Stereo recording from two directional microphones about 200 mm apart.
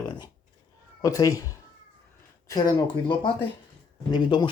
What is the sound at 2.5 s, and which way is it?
Speech, 20° left (ahead or behind).